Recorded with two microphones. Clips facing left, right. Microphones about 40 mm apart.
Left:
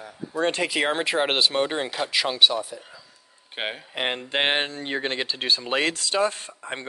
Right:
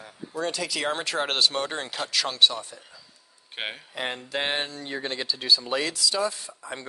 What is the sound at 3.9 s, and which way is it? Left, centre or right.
Speech, left.